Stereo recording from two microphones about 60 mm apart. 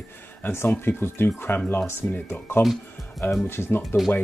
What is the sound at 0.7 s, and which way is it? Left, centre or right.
Speech, left.